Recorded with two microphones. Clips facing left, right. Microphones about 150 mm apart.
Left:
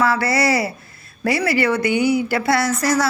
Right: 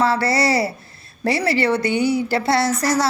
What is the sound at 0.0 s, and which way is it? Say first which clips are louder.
A woman's voice: even; 30° right (ahead or behind).